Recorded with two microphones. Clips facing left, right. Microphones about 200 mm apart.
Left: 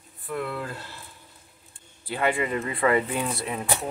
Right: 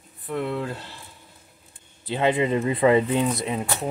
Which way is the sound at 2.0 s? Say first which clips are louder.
Right 4 dB; 20° right (ahead or behind).